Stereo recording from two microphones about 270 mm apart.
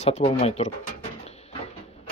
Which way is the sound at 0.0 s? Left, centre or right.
Left.